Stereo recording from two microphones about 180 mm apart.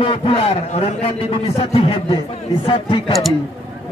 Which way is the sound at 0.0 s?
30° left (ahead or behind).